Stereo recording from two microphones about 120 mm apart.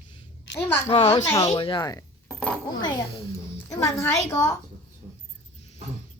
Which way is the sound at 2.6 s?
35° left (ahead or behind).